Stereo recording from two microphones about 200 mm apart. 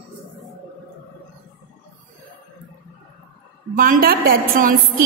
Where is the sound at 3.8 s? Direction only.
45° right (ahead or behind).